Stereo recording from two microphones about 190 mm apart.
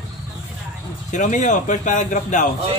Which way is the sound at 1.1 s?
40° left (ahead or behind).